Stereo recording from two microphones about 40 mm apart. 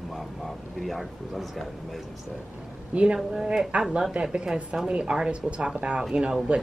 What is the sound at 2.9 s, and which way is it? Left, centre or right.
Speech, right.